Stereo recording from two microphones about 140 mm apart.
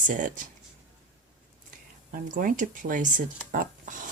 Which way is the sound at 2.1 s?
80° right.